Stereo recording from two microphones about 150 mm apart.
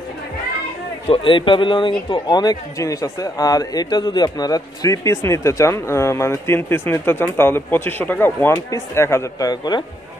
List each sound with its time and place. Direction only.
1.0 s speech: 35° left (ahead or behind)